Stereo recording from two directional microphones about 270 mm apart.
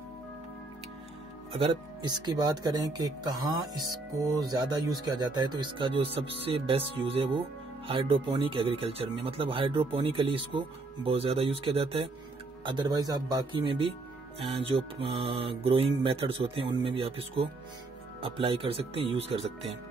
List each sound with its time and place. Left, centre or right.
1.5 s speech: centre
4.1 s speech: centre
7.9 s mantra: centre
12.6 s speech: centre
14.4 s mantra: centre